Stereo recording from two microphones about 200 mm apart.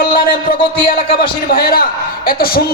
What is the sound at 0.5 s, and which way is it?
A man's voice, 45° left (ahead or behind).